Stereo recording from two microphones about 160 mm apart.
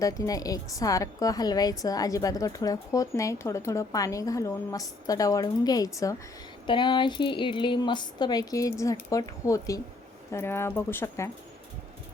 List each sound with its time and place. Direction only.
0.0 s a woman's voice: 20° left (ahead or behind)